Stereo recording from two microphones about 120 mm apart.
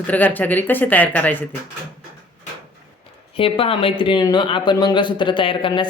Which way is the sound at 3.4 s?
50° left (ahead or behind).